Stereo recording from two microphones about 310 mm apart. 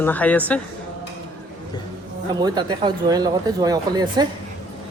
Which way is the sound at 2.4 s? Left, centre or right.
Centre.